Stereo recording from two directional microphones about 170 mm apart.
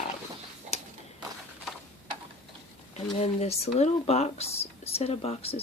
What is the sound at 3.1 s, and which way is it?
Speech, 40° left (ahead or behind).